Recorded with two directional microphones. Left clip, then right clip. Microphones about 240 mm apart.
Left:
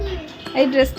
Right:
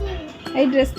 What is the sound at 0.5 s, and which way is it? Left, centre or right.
Speech, centre.